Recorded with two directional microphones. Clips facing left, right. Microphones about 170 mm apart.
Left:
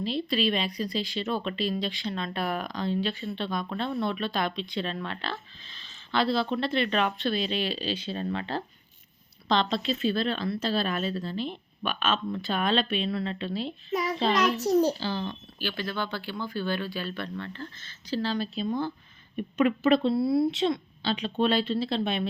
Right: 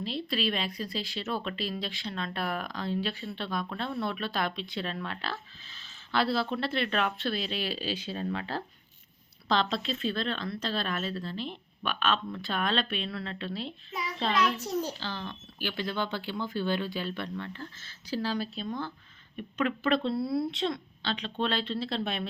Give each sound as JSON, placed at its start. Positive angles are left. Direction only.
{"t": 0.0, "sound": "a woman's voice", "side_deg": 0}
{"t": 15.5, "sound": "speech", "side_deg": -15}
{"t": 18.5, "sound": "a woman's voice", "side_deg": 10}